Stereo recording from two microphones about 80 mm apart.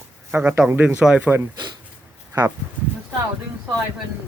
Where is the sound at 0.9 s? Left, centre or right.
Centre.